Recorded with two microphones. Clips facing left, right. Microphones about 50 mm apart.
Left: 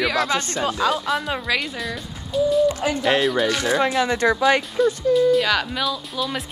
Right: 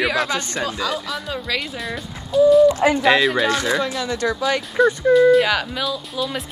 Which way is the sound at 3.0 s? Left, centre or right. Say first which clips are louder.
Right 2 dB; right.